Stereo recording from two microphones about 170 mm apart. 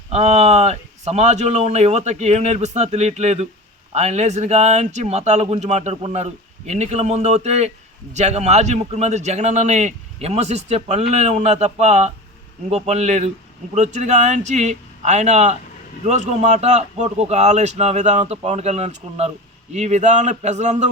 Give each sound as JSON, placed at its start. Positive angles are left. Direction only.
{"t": 0.1, "sound": "speech", "side_deg": -40}